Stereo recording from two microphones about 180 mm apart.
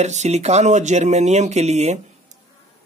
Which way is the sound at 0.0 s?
40° right (ahead or behind).